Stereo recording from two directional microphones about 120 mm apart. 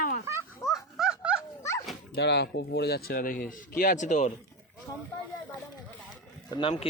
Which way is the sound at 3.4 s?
90° left.